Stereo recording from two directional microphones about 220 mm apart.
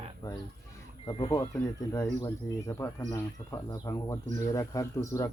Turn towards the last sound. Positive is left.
turn(degrees=15)  # may be behind; listen again after turning